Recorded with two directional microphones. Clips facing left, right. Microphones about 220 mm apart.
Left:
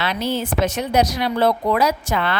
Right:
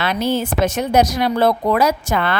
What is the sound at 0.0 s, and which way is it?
A woman's voice, 50° right (ahead or behind).